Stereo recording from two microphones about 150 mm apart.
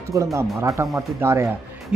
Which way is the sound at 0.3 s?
20° right (ahead or behind).